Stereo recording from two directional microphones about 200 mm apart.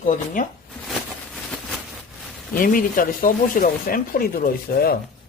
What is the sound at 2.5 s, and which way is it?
Speech, 45° left (ahead or behind).